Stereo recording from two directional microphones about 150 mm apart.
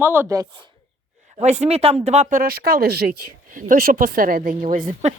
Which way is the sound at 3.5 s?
60° right (ahead or behind).